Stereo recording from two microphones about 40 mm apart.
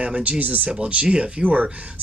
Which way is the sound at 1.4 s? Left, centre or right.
Right.